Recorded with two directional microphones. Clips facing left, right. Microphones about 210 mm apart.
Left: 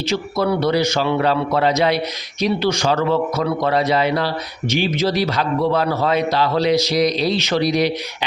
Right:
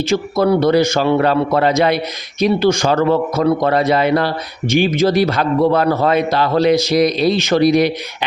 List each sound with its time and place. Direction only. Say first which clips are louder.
0.0 s a man's voice: right 5 dB; 50° right (ahead or behind)